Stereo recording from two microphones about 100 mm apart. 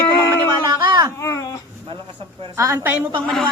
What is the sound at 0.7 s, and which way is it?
Speech, 40° right (ahead or behind).